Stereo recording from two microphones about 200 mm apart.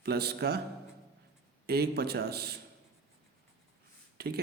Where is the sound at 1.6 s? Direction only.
50° right (ahead or behind).